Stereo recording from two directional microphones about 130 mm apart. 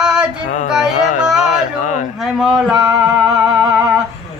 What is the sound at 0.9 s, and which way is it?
Carnatic music, 70° left (ahead or behind).